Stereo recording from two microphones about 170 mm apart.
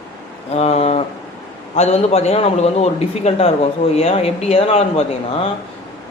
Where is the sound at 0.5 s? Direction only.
40° left (ahead or behind).